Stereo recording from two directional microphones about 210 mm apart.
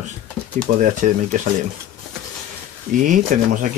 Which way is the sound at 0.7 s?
35° right (ahead or behind).